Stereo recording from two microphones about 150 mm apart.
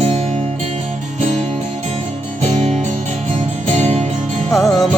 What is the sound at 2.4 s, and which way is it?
Music, 50° right (ahead or behind).